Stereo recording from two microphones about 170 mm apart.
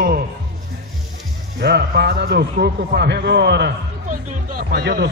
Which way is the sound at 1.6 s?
75° right (ahead or behind).